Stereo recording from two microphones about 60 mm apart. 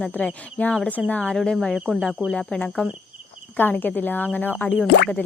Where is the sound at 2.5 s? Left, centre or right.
Left.